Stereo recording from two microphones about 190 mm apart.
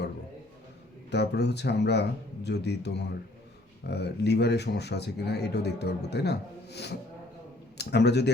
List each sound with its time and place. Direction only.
1.1 s speech: 60° left (ahead or behind)